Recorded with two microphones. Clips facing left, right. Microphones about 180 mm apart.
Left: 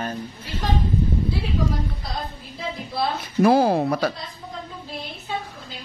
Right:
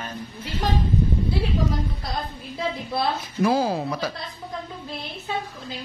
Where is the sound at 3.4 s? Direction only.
60° left (ahead or behind).